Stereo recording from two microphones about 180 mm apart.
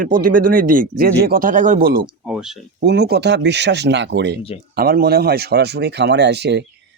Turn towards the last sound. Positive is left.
turn(degrees=-70)  # may be behind; listen again after turning